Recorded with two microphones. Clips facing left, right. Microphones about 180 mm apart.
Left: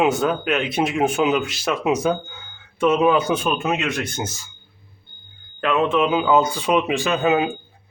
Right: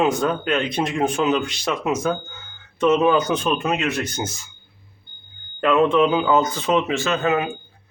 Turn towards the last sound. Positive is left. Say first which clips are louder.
# left 2 dB
turn(degrees=20)  # may be behind; listen again after turning